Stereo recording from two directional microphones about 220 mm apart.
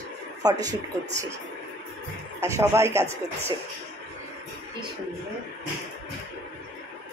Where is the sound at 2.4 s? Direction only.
10° right (ahead or behind).